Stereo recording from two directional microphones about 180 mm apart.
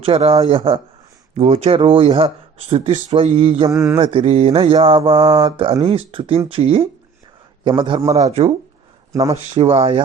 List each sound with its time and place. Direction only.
0.0 s speech: 35° right (ahead or behind)
3.7 s mantra: 15° right (ahead or behind)
3.9 s speech: 30° right (ahead or behind)